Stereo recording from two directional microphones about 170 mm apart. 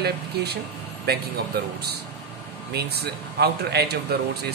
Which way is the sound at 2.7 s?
70° right (ahead or behind).